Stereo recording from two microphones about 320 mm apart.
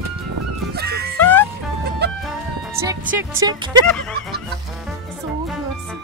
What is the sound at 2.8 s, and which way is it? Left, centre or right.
Music, centre.